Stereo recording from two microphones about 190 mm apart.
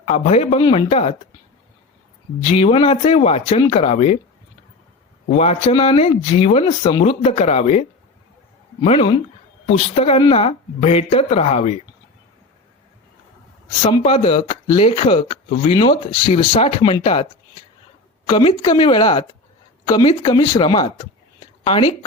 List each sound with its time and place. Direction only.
0.0 s a woman's voice: 35° left (ahead or behind)
2.4 s a woman's voice: 30° left (ahead or behind)
5.3 s a woman's voice: 35° left (ahead or behind)
13.9 s a woman's voice: 30° left (ahead or behind)
18.3 s speech: 25° left (ahead or behind)